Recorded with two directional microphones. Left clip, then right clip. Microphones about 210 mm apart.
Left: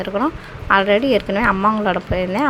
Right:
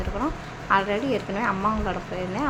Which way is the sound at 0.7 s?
30° left (ahead or behind).